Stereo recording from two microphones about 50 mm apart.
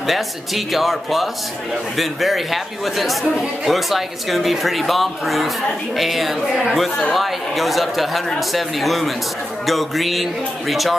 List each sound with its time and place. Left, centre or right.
0.0 s speech: centre